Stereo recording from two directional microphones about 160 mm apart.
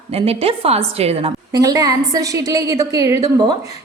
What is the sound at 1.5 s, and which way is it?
A woman's voice, 25° right (ahead or behind).